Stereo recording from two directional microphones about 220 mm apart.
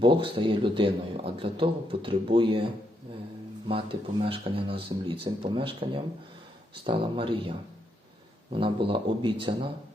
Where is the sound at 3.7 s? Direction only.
25° right (ahead or behind).